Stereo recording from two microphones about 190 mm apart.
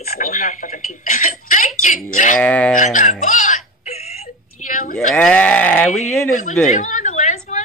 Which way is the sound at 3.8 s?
35° left (ahead or behind).